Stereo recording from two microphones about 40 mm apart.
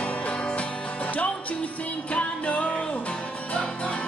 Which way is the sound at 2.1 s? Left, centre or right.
Left.